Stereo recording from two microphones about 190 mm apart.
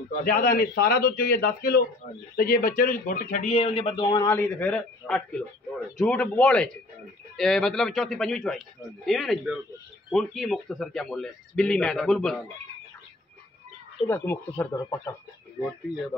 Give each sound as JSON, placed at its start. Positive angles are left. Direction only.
{"t": 0.1, "sound": "a man's voice", "side_deg": 50}
{"t": 14.0, "sound": "speech", "side_deg": 10}